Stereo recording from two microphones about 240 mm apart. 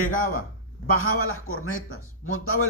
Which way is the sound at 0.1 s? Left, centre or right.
Left.